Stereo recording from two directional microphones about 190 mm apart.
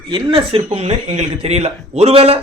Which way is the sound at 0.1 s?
30° right (ahead or behind).